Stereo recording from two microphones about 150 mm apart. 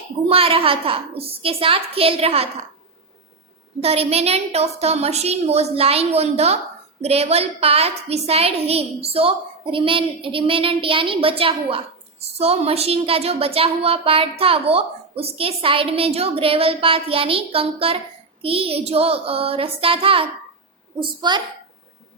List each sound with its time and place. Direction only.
0.3 s a woman's voice: 40° right (ahead or behind)
3.8 s a woman's voice: 40° right (ahead or behind)